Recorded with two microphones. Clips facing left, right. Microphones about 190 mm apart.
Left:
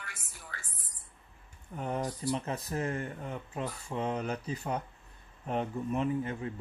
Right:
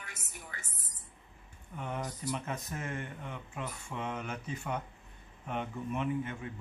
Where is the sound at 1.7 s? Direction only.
40° left (ahead or behind).